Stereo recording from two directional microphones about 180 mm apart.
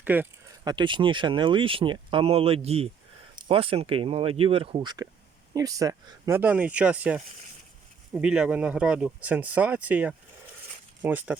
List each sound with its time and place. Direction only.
0.0 s speech: 10° right (ahead or behind)
0.6 s speech: 25° right (ahead or behind)